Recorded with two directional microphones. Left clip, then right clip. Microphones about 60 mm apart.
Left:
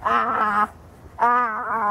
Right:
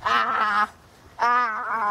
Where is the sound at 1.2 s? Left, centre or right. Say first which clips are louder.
Left 2 dB; right.